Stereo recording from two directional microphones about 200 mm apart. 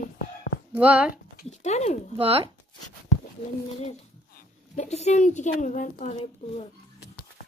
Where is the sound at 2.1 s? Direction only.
30° right (ahead or behind).